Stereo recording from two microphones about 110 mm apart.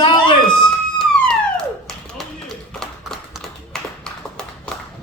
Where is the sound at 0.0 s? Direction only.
50° left (ahead or behind).